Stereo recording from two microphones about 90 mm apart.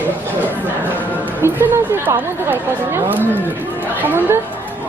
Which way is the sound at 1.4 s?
20° right (ahead or behind).